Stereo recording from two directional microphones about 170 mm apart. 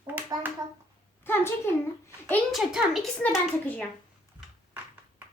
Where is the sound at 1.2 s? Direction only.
15° left (ahead or behind).